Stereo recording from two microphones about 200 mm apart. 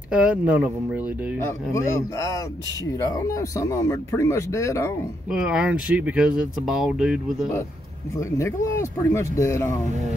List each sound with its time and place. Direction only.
0.1 s speech: 5° right (ahead or behind)
1.4 s speech: 15° left (ahead or behind)
5.3 s speech: 5° right (ahead or behind)
8.2 s speech: 15° left (ahead or behind)